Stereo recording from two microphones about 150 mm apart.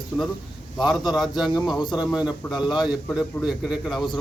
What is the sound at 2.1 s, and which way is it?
Speech, 5° right (ahead or behind).